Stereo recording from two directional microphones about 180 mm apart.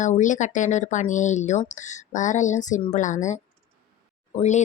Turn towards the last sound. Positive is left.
turn(degrees=40)  # may be behind; listen again after turning